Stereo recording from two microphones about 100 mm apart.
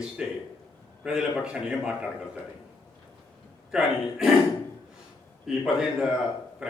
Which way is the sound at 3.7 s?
5° right (ahead or behind).